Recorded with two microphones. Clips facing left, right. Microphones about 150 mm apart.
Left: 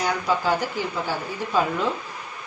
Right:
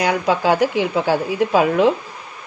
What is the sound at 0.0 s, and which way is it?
Speech, 80° right.